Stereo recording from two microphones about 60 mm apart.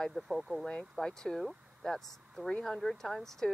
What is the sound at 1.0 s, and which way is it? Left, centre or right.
Speech, centre.